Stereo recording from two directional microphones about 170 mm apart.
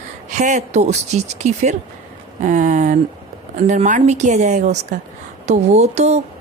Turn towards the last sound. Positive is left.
turn(degrees=-40)  # may be behind; listen again after turning